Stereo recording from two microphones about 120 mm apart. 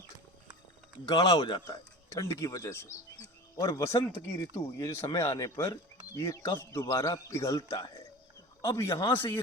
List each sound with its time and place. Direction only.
1.0 s speech: 30° left (ahead or behind)